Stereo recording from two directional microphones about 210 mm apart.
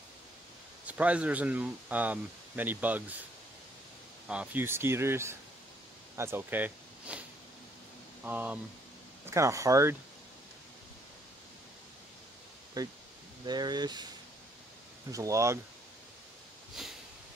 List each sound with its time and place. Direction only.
0.8 s speech: 5° right (ahead or behind)
4.3 s speech: 5° right (ahead or behind)
12.8 s speech: 20° right (ahead or behind)
15.0 s speech: 15° right (ahead or behind)
16.8 s a sound: centre (ahead or behind)